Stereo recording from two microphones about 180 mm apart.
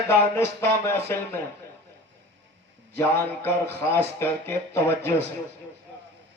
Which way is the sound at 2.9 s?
15° left (ahead or behind).